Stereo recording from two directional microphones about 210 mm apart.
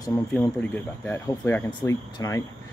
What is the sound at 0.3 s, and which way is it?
Speech, 5° left (ahead or behind).